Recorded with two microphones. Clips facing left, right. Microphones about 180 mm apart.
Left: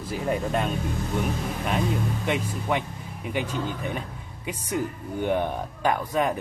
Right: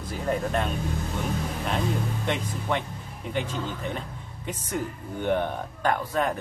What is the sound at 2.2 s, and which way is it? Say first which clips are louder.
Speech: left 2 dB; 5° left (ahead or behind).